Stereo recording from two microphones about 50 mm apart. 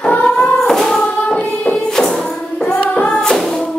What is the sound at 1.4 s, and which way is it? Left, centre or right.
Music, centre.